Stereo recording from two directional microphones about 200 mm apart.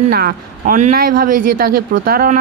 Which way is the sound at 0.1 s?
45° right (ahead or behind).